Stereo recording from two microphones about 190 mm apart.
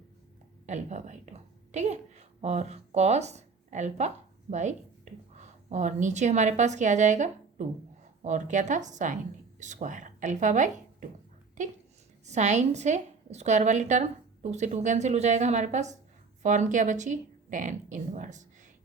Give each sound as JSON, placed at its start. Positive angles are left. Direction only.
{"t": 0.6, "sound": "a woman's voice", "side_deg": -35}
{"t": 5.4, "sound": "a woman's voice", "side_deg": -40}